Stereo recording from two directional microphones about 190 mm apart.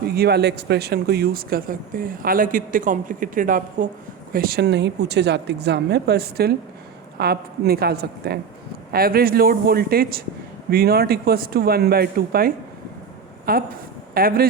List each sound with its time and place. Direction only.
0.1 s a woman's voice: 60° right (ahead or behind)